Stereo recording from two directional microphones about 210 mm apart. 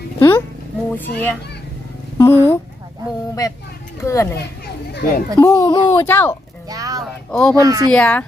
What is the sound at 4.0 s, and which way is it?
Speech, 15° left (ahead or behind).